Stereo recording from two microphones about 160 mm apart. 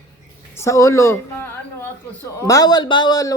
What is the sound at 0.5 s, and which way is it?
A woman's voice, 15° left (ahead or behind).